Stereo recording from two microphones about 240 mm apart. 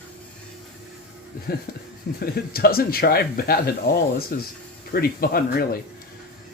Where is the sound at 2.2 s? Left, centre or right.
Left.